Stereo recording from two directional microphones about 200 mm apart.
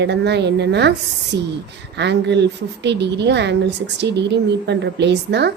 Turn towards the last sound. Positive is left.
turn(degrees=-60)  # may be behind; listen again after turning